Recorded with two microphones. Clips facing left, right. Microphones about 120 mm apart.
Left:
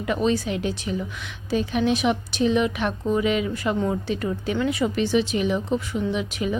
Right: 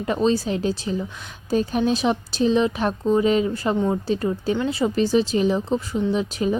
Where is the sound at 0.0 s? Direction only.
30° right (ahead or behind).